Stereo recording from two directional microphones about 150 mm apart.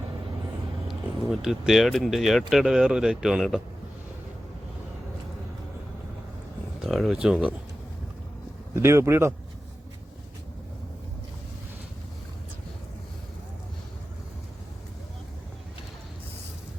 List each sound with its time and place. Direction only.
1.3 s speech: 5° right (ahead or behind)
6.8 s speech: centre (ahead or behind)
8.7 s speech: 20° right (ahead or behind)